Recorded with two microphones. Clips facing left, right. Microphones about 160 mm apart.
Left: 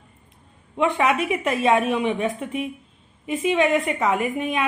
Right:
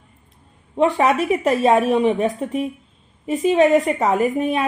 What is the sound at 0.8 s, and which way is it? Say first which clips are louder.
Speech: right 4 dB; 35° right (ahead or behind).